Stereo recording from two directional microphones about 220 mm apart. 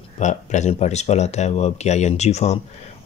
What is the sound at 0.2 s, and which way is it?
Speech, 35° left (ahead or behind).